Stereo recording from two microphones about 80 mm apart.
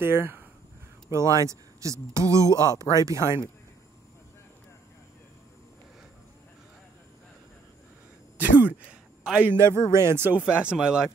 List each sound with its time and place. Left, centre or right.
0.0 s speech: right
1.1 s speech: right
8.4 s speech: right
9.6 s speech: right
10.6 s speech: centre